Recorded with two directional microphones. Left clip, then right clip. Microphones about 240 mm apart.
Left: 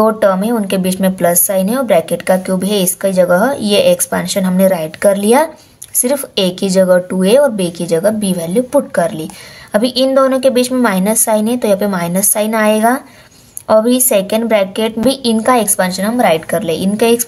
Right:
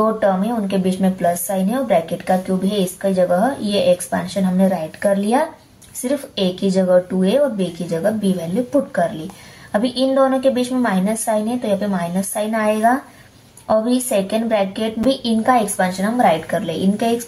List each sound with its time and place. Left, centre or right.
0.0 s a woman's voice: left
9.7 s a woman's voice: left